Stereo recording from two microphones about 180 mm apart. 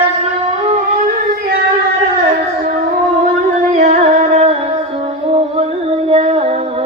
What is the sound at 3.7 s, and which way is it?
Music, 40° right (ahead or behind).